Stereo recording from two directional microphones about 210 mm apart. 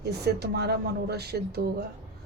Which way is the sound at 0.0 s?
50° right (ahead or behind).